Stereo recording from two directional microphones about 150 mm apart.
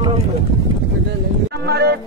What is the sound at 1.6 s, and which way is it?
Music, 90° right.